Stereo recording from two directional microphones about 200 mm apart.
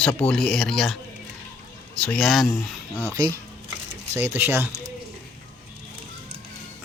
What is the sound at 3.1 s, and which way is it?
Speech, 15° right (ahead or behind).